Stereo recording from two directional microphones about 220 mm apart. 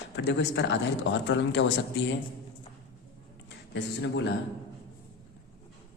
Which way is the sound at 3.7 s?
50° left (ahead or behind).